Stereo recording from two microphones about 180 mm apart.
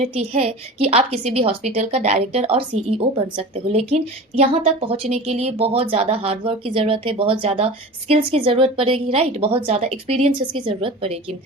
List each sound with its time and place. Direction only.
0.0 s a woman's voice: 35° right (ahead or behind)